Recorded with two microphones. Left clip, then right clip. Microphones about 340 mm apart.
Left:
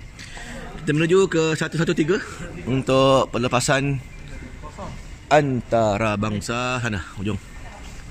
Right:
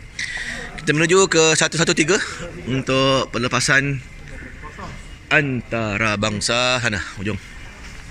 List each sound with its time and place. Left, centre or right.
0.2 s speech: centre
2.7 s speech: centre
5.3 s speech: centre